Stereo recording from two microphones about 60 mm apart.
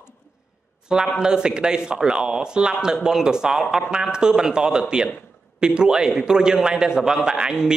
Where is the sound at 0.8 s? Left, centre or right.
Centre.